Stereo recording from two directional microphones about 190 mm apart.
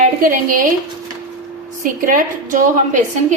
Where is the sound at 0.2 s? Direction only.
45° right (ahead or behind).